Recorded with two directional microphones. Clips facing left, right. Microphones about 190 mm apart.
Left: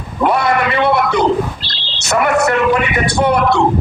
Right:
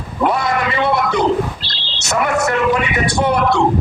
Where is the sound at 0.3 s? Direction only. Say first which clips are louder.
Left 3 dB; 65° left (ahead or behind).